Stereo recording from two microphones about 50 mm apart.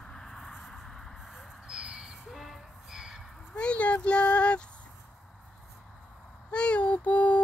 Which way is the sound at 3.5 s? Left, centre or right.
Left.